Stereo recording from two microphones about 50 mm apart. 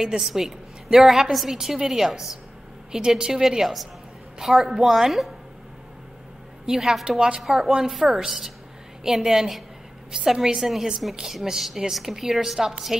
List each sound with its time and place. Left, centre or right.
0.2 s a woman's voice: centre
6.6 s a woman's voice: centre